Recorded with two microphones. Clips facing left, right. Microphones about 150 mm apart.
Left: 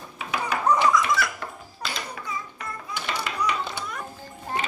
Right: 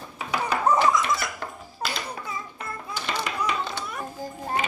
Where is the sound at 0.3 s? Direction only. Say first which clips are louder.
Right 1 dB; 30° right (ahead or behind).